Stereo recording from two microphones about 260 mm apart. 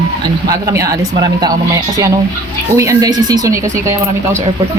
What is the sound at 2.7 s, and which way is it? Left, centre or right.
Speech, centre.